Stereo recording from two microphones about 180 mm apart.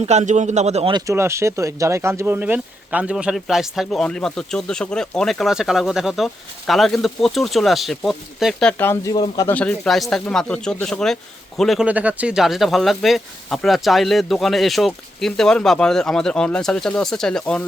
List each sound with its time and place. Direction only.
0.0 s a man's voice: 40° right (ahead or behind)
0.9 s speech: 15° right (ahead or behind); by 9.6 s 20° left (ahead or behind)
9.6 s speech: 5° left (ahead or behind)